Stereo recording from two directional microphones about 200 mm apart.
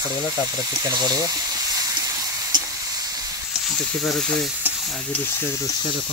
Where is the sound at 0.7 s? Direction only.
20° right (ahead or behind).